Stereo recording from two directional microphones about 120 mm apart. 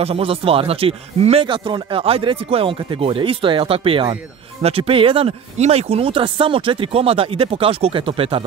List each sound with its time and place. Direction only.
0.0 s speech: 55° right (ahead or behind)
5.6 s speech: 60° right (ahead or behind)